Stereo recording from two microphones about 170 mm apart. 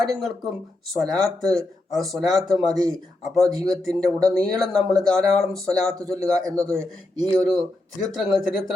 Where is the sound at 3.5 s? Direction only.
20° right (ahead or behind).